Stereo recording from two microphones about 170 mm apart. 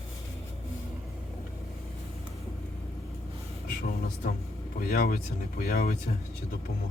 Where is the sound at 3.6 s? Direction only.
60° left (ahead or behind).